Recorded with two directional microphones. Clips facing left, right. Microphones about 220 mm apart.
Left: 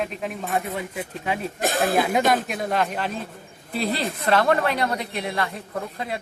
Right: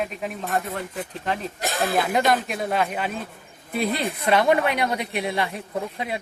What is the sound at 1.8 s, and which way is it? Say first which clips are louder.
Speech: left 1 dB; centre (ahead or behind).